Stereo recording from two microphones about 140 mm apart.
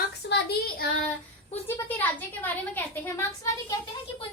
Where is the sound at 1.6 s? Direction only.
15° left (ahead or behind).